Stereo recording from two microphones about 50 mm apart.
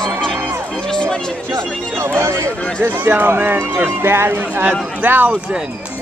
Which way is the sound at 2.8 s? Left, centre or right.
Right.